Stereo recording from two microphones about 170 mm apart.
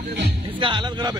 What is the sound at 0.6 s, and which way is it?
Music, 30° right (ahead or behind).